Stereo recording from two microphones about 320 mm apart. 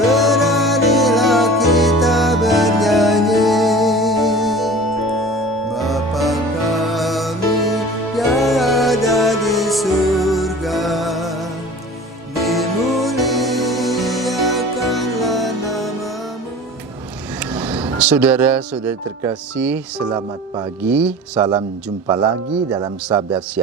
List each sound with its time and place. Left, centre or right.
0.0 s music: centre
12.4 s music: centre
17.5 s speech: centre